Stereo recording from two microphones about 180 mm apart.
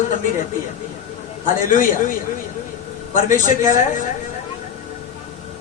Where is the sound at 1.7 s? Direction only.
50° left (ahead or behind).